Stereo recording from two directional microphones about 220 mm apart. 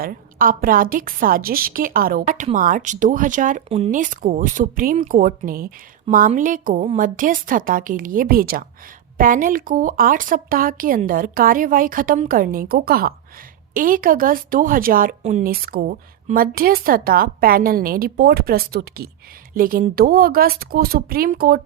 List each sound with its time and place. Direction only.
0.0 s a woman's voice: 40° right (ahead or behind)